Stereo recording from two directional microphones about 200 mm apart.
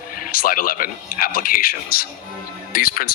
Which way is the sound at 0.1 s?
45° left (ahead or behind).